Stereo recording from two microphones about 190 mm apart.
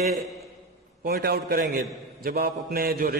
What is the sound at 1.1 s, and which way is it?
A man's voice, 55° right (ahead or behind).